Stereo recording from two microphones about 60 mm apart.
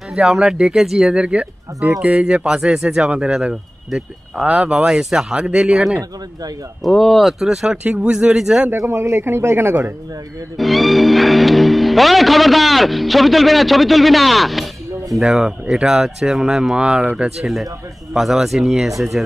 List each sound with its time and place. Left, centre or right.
0.1 s speech: centre
1.1 s speech: centre
6.8 s speech: centre
8.7 s speech: right
10.6 s speech: centre